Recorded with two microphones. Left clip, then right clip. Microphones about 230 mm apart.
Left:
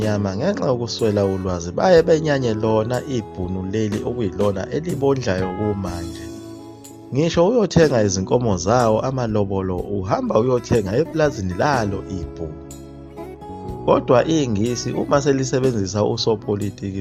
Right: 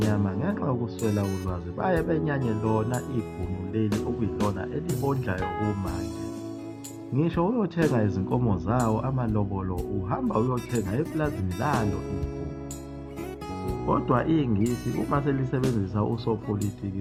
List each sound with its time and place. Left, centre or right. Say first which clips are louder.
0.1 s speech: left 8 dB; left
3.8 s music: left 6 dB; centre
4.5 s speech: left 7 dB; left
5.4 s music: left 6 dB; centre
7.2 s speech: left 10 dB; left
13.8 s speech: left 10 dB; left